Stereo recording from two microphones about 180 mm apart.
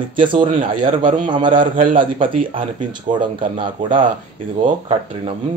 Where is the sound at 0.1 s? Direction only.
25° right (ahead or behind).